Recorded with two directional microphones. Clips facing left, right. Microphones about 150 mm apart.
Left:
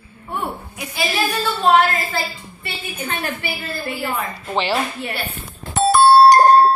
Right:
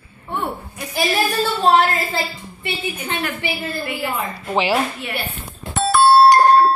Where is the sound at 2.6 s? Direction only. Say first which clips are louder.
Right 3 dB; 20° right (ahead or behind).